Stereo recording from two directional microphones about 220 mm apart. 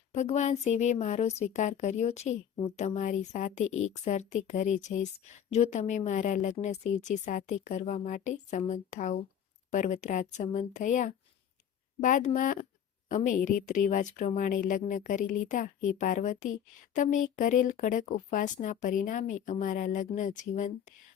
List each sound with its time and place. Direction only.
0.1 s speech: 30° left (ahead or behind)
3.6 s a woman's voice: 65° left (ahead or behind)
4.0 s speech: 30° left (ahead or behind)